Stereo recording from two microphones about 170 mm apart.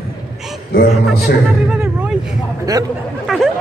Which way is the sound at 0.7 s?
65° left (ahead or behind).